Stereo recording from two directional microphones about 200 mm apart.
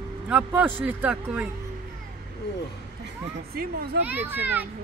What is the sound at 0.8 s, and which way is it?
Speech, 5° right (ahead or behind).